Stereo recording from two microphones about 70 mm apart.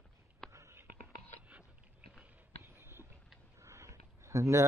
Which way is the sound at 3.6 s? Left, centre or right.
Right.